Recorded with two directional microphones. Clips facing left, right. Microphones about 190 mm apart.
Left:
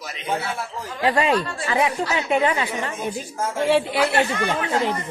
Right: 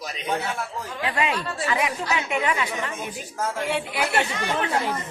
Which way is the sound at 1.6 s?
30° left (ahead or behind).